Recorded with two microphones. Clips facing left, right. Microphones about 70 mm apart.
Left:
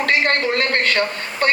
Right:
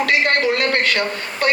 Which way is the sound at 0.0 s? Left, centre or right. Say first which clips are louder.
Right 1 dB; left.